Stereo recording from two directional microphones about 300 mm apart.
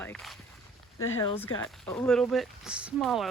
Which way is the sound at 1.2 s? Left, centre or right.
Centre.